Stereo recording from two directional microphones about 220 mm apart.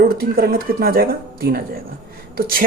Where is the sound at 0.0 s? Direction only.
45° right (ahead or behind).